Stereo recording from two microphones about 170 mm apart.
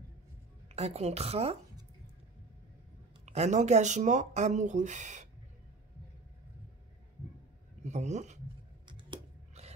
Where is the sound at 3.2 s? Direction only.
40° right (ahead or behind).